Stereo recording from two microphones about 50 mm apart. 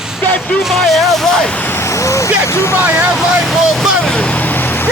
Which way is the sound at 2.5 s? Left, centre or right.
Left.